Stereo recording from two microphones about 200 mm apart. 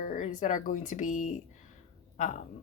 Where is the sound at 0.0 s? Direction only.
40° left (ahead or behind).